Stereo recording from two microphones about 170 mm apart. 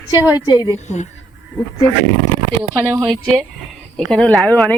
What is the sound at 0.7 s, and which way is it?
Speech, 45° left (ahead or behind).